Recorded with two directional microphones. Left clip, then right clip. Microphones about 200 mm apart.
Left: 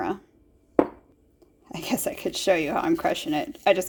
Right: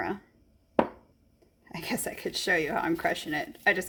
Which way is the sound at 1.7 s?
30° left (ahead or behind).